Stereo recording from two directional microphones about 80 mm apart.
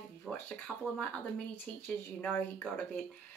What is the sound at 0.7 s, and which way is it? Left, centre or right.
Speech, centre.